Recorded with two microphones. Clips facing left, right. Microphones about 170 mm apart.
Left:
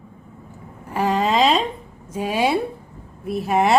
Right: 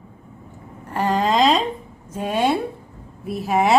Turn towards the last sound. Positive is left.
turn(degrees=0)  # may be behind; listen again after turning